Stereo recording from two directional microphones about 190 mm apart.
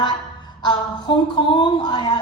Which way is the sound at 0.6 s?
20° left (ahead or behind).